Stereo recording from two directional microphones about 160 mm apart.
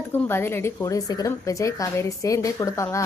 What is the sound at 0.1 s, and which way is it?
A woman's voice, 15° left (ahead or behind).